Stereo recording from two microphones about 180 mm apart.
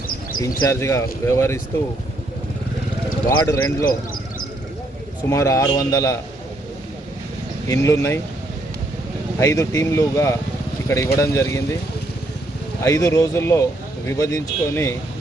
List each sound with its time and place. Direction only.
0.4 s speech: 15° left (ahead or behind)
3.2 s speech: 15° left (ahead or behind)
5.3 s a man's voice: 15° left (ahead or behind)
7.7 s speech: 15° left (ahead or behind)
9.4 s speech: 15° left (ahead or behind)
12.8 s speech: 20° left (ahead or behind)